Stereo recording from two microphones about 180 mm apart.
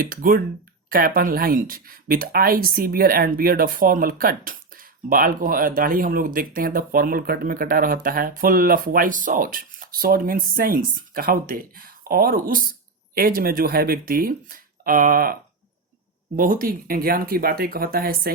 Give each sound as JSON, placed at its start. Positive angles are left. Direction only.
{"t": 0.0, "sound": "speech", "side_deg": -50}